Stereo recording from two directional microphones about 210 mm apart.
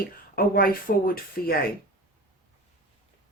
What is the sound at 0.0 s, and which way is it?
Speech, 45° left (ahead or behind).